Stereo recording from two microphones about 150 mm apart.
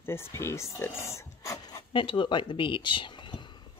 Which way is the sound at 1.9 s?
35° left (ahead or behind).